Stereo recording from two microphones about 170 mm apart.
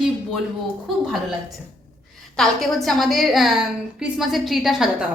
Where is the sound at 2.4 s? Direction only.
Centre (ahead or behind).